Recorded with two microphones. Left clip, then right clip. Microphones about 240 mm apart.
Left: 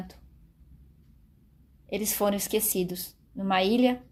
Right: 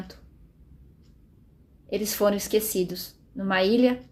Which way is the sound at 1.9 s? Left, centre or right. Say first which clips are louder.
Right 4 dB; left.